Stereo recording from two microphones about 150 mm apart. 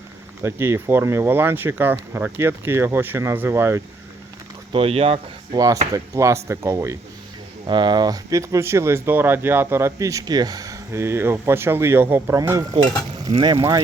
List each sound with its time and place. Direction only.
0.4 s speech: 15° right (ahead or behind)
4.7 s speech: 40° right (ahead or behind)
5.5 s speech: 25° right (ahead or behind)
7.7 s speech: 30° right (ahead or behind)